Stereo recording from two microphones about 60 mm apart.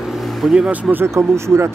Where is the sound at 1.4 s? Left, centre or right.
Right.